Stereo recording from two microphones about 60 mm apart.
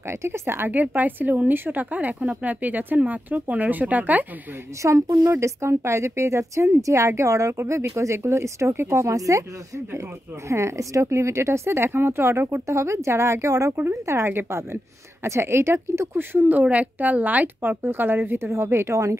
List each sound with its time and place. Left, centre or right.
0.1 s speech: right
4.8 s speech: right
5.4 s speech: right
9.1 s speech: right
10.5 s speech: right
13.7 s speech: right
18.5 s speech: right